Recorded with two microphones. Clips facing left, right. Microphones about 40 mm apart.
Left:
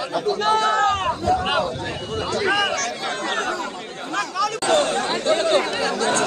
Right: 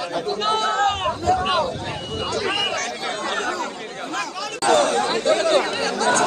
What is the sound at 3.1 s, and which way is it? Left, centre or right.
Speech, left.